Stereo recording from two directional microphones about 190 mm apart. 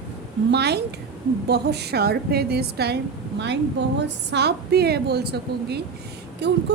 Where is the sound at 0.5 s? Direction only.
60° right (ahead or behind).